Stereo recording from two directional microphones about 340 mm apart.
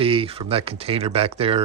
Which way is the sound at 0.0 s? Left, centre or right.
Centre.